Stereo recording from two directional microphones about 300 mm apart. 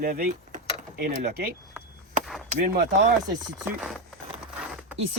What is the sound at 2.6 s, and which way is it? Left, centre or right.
Speech, right.